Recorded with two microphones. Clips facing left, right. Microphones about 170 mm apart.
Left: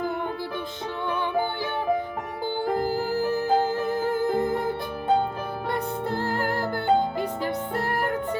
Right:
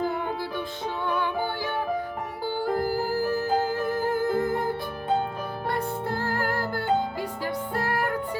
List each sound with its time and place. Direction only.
2.7 s music: 20° left (ahead or behind)
5.7 s music: 20° left (ahead or behind)